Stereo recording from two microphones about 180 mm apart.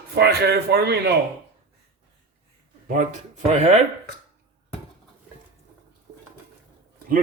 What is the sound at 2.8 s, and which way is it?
Speech, 45° right (ahead or behind).